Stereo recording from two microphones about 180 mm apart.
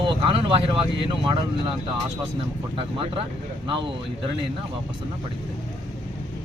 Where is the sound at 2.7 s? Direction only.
30° right (ahead or behind).